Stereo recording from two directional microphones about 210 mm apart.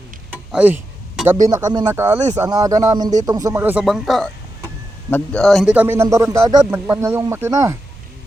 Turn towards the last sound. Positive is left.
turn(degrees=-15)  # may be behind; listen again after turning